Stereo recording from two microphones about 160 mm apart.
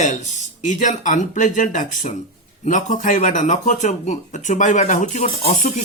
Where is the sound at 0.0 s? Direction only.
50° left (ahead or behind).